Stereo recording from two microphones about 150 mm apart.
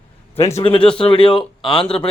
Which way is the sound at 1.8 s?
5° left (ahead or behind).